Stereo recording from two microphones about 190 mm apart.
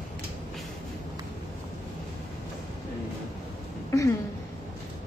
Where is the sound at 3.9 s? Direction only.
15° left (ahead or behind).